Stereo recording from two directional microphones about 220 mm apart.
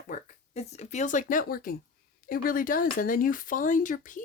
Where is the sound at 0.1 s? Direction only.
30° left (ahead or behind).